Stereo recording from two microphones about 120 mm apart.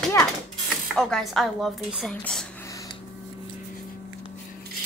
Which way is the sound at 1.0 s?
5° left (ahead or behind).